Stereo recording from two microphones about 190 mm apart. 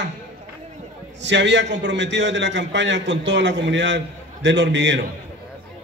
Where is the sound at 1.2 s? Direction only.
70° right (ahead or behind).